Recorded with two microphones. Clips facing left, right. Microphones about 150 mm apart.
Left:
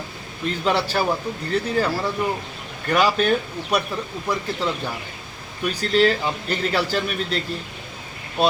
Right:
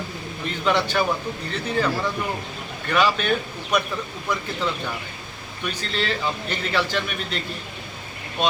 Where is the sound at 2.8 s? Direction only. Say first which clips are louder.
Left 2 dB; 40° left (ahead or behind).